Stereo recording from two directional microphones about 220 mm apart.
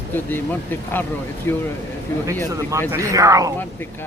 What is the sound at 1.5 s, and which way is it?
Speech, 10° left (ahead or behind).